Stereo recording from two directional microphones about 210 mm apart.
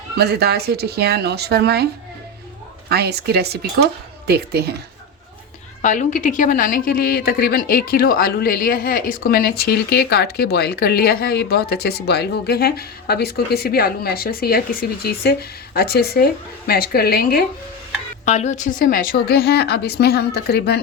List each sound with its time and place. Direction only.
0.2 s speech: 50° right (ahead or behind)
2.9 s speech: 50° right (ahead or behind)
5.8 s a woman's voice: 35° left (ahead or behind)
18.3 s a woman's voice: 35° left (ahead or behind); by 20.7 s 50° left (ahead or behind)